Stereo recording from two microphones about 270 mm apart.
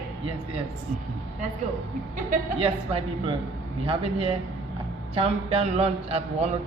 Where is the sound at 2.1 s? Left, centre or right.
Right.